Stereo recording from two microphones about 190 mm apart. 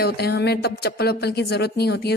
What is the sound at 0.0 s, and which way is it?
Speech, 55° left (ahead or behind).